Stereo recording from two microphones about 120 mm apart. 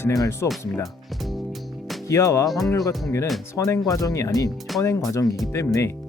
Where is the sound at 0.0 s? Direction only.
25° left (ahead or behind).